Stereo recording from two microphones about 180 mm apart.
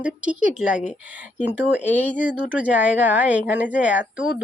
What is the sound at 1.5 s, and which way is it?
Speech, 10° right (ahead or behind).